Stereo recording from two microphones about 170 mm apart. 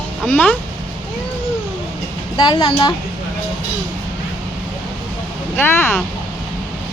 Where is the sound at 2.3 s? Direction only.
30° left (ahead or behind).